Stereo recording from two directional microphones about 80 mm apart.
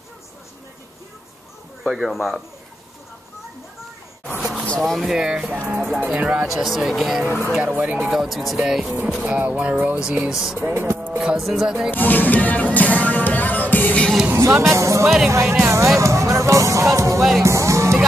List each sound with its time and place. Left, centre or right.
1.8 s speech: centre
4.4 s a sound: centre
4.6 s speech: centre
6.4 s speech: centre
7.6 s speech: right
8.1 s speech: centre
9.2 s speech: centre
10.6 s music: right
11.1 s speech: centre
11.9 s music: left
14.3 s music: right
15.0 s speech: centre
15.5 s music: right